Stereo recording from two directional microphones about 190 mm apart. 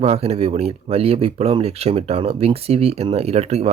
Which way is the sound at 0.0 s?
35° right (ahead or behind).